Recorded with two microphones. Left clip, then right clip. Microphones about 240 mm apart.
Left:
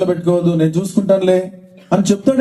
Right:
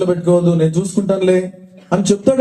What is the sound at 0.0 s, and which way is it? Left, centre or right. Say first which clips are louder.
A man's voice: right 1 dB; left.